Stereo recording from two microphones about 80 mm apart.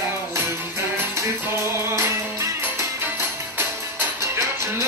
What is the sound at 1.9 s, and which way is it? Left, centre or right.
Music, right.